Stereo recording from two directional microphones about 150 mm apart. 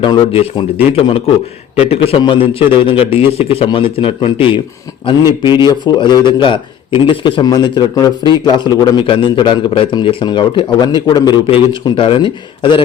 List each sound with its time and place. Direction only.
0.0 s a man's voice: 35° left (ahead or behind)